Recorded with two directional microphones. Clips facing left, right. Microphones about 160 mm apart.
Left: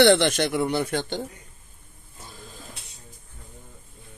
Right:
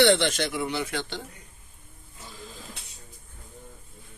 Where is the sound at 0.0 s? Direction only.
55° left (ahead or behind).